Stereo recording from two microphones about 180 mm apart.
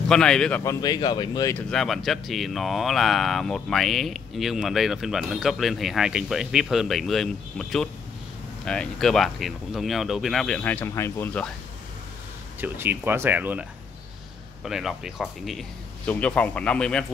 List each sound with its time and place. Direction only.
0.1 s speech: 5° left (ahead or behind)
0.7 s speech: 20° left (ahead or behind)
1.5 s speech: 5° left (ahead or behind)
12.5 s speech: 10° right (ahead or behind); by 17.0 s 5° left (ahead or behind)